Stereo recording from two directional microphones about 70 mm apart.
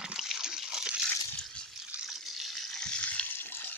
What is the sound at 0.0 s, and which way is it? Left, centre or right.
Water, centre.